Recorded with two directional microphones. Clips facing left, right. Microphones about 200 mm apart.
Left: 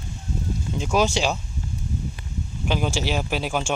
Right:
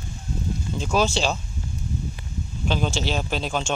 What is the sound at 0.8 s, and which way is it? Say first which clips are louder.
Speech: left 1 dB; 15° left (ahead or behind).